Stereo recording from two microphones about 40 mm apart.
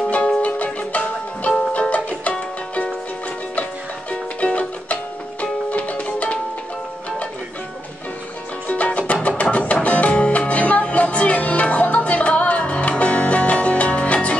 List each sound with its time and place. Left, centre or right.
0.4 s music: left
4.1 s music: left
8.6 s music: left